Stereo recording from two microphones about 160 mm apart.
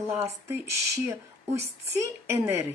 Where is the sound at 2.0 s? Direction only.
15° right (ahead or behind).